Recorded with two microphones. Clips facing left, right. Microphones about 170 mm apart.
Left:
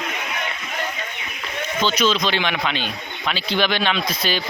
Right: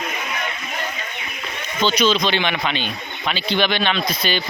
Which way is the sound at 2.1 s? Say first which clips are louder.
Right 2 dB; centre (ahead or behind).